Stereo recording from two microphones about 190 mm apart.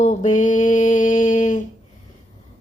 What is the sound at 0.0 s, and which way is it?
Mantra, 40° left (ahead or behind).